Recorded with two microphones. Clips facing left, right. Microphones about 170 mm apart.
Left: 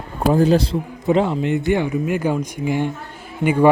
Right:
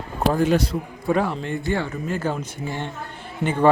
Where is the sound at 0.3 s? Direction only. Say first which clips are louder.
Left 6 dB; 35° left (ahead or behind).